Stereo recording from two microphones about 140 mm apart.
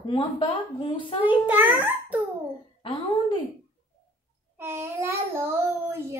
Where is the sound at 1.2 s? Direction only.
10° right (ahead or behind).